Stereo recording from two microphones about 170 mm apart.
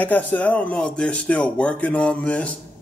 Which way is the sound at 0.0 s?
10° left (ahead or behind).